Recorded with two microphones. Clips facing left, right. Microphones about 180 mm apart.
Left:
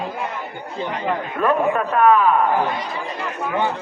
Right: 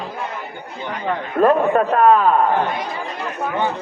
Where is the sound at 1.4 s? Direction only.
35° right (ahead or behind).